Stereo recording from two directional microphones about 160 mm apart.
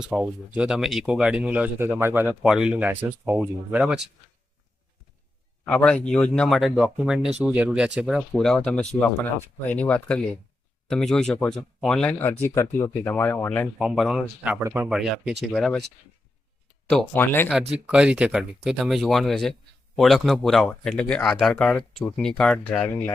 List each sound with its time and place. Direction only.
0.0 s speech: 5° right (ahead or behind)
5.6 s speech: 5° left (ahead or behind)
13.7 s speech: centre (ahead or behind)
14.6 s speech: 15° right (ahead or behind)
14.8 s speech: 5° right (ahead or behind)
16.9 s speech: 10° left (ahead or behind)
17.5 s speech: 5° right (ahead or behind)